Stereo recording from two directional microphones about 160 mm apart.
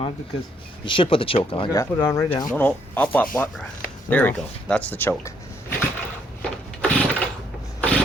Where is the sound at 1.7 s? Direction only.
20° left (ahead or behind).